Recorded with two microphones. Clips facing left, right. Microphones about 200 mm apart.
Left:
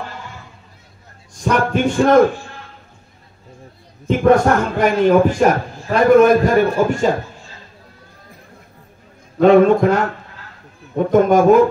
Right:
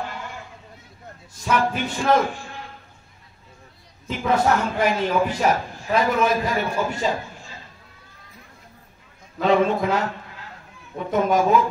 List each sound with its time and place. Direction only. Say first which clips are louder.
1.4 s a man's voice: left 6 dB; 55° left (ahead or behind)
4.1 s a man's voice: left 8 dB; 50° left (ahead or behind)
9.4 s a man's voice: left 9 dB; 55° left (ahead or behind)